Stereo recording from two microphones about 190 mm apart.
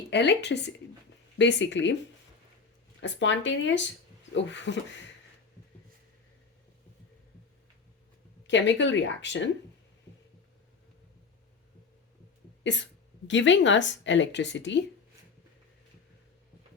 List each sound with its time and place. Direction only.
0.1 s speech: 65° left (ahead or behind)
3.0 s speech: 75° left (ahead or behind)
8.4 s speech: 70° left (ahead or behind)
13.2 s speech: 75° left (ahead or behind)